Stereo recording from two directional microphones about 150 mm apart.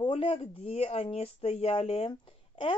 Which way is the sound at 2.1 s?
35° left (ahead or behind).